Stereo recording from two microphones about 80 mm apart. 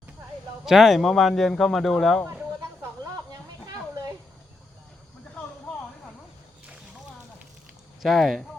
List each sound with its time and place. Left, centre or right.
0.6 s speech: centre
8.0 s speech: centre